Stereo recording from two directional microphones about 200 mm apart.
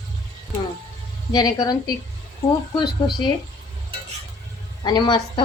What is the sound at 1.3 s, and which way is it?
Speech, 20° left (ahead or behind).